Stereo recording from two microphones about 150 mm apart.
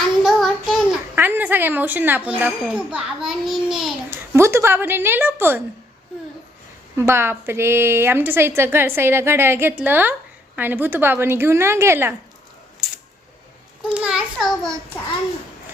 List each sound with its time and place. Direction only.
0.2 s child singing: centre (ahead or behind)
1.1 s a woman's voice: 15° right (ahead or behind)
4.4 s a woman's voice: 15° right (ahead or behind)
6.9 s a woman's voice: 15° right (ahead or behind)
12.8 s a sound: 5° right (ahead or behind)
14.0 s a child's voice: 5° right (ahead or behind)